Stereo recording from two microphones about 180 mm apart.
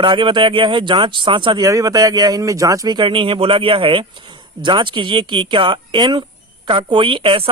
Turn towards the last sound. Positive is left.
turn(degrees=-30)  # may be behind; listen again after turning